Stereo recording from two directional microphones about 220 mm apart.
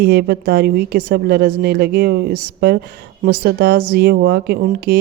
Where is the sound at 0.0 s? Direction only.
45° right (ahead or behind).